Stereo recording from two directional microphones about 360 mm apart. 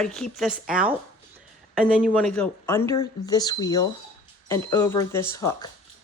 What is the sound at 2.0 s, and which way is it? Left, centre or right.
Speech, centre.